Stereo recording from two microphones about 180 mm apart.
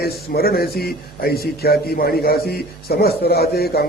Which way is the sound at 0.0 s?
60° left (ahead or behind).